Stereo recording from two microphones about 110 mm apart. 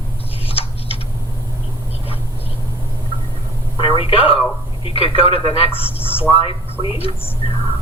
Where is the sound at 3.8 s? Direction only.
60° left (ahead or behind).